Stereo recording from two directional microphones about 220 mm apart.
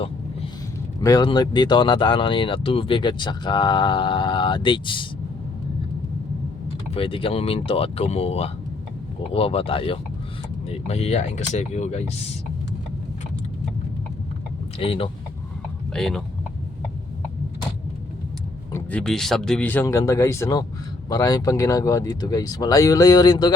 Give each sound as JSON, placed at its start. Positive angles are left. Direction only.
{"t": 1.0, "sound": "speech", "side_deg": 20}
{"t": 6.9, "sound": "speech", "side_deg": 25}
{"t": 14.8, "sound": "speech", "side_deg": 25}
{"t": 15.9, "sound": "speech", "side_deg": 0}
{"t": 18.7, "sound": "speech", "side_deg": 5}